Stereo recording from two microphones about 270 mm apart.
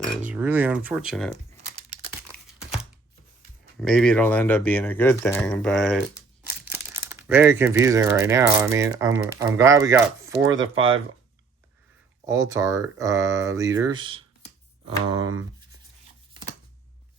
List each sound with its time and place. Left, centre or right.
0.3 s speech: centre
2.3 s crumpling: centre
3.8 s speech: centre
10.3 s speech: right
12.2 s speech: centre
16.3 s chopping: centre